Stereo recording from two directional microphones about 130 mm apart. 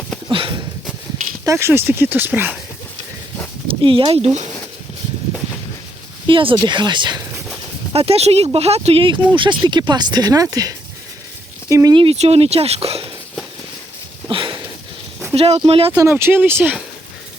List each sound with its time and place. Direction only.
0.3 s sniff: 40° right (ahead or behind)
1.5 s speech: 20° right (ahead or behind)
3.7 s speech: 40° right (ahead or behind)
6.2 s speech: 40° right (ahead or behind)
7.9 s speech: 50° right (ahead or behind); by 11.9 s 25° right (ahead or behind)
11.9 s speech: 50° right (ahead or behind)
14.3 s a sound: 40° right (ahead or behind)
15.4 s speech: 50° right (ahead or behind)
16.0 s speech: 20° right (ahead or behind)